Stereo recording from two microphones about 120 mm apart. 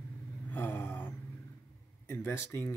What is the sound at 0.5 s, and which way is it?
Vehicle, 15° left (ahead or behind).